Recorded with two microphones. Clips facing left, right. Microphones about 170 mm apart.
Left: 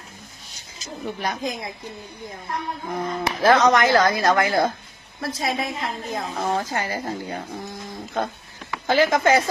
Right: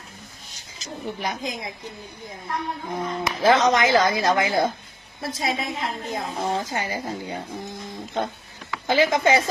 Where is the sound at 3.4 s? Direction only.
20° right (ahead or behind).